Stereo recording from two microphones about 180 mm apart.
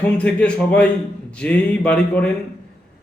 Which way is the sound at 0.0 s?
5° left (ahead or behind).